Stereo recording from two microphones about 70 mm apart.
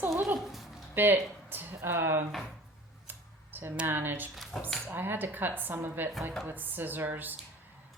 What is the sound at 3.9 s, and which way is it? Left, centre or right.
Speech, right.